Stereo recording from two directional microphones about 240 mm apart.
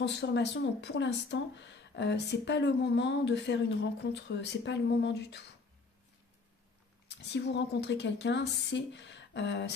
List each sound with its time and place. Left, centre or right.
0.0 s speech: left
7.1 s speech: left